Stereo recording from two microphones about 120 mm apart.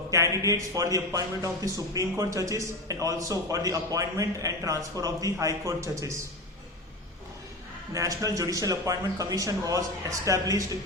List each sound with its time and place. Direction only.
0.1 s speech: 25° right (ahead or behind)
7.9 s speech: 30° right (ahead or behind)